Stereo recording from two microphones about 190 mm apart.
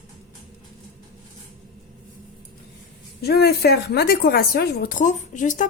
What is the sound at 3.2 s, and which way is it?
A woman's voice, 55° left (ahead or behind).